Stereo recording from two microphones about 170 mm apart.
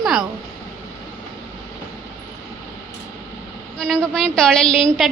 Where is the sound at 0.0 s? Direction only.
Centre (ahead or behind).